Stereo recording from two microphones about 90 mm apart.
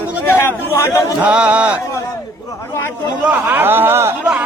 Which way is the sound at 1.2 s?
15° right (ahead or behind).